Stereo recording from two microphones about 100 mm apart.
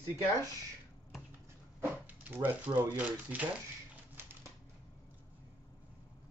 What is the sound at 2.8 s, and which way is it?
Speech, 20° right (ahead or behind).